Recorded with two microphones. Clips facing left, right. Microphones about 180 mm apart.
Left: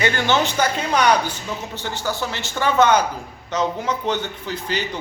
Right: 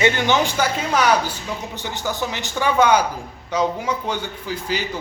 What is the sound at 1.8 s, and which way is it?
A man's voice, 15° right (ahead or behind).